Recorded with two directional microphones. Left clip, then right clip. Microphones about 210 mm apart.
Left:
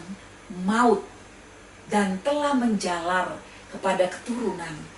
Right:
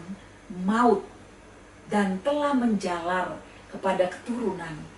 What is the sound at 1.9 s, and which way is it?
A woman's voice, 10° right (ahead or behind).